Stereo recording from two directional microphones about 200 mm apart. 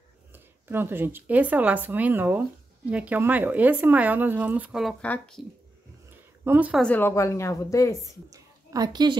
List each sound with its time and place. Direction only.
0.3 s speech: 10° right (ahead or behind); by 5.4 s 5° left (ahead or behind)
6.4 s speech: 10° right (ahead or behind)
6.8 s a woman's voice: 10° left (ahead or behind)
8.3 s a woman's voice: 15° right (ahead or behind)